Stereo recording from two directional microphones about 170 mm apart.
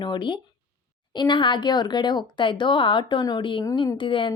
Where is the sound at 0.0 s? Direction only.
25° left (ahead or behind).